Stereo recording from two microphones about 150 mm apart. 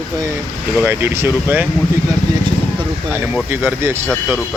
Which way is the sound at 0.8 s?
15° right (ahead or behind).